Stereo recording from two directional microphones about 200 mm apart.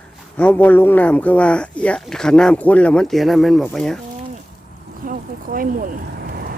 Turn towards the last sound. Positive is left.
turn(degrees=-45)  # may be behind; listen again after turning